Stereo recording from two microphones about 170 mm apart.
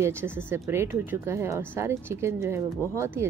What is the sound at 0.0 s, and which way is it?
Speech, 15° right (ahead or behind).